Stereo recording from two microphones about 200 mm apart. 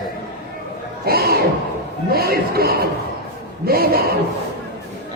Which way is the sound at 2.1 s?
50° right (ahead or behind).